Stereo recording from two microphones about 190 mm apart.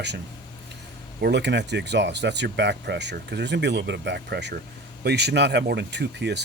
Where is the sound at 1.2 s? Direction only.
65° right (ahead or behind).